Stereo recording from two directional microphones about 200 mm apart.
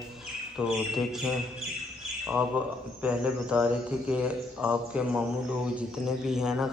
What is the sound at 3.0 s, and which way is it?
Speech, 5° right (ahead or behind).